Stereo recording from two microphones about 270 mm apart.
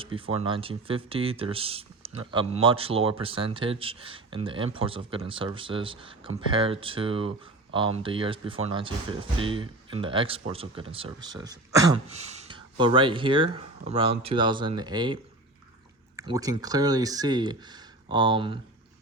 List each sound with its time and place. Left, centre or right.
0.0 s speech: centre
12.0 s speech: right